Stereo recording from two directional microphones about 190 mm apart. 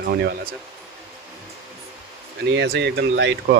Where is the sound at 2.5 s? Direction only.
65° right (ahead or behind).